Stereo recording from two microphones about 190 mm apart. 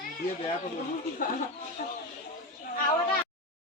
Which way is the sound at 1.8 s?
50° left (ahead or behind).